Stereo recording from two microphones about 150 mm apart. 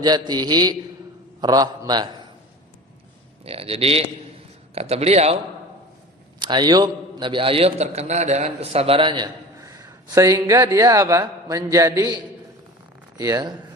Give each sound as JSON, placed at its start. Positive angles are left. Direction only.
{"t": 0.0, "sound": "a man's voice", "side_deg": -25}
{"t": 3.4, "sound": "a man's voice", "side_deg": -40}
{"t": 6.4, "sound": "a man's voice", "side_deg": -30}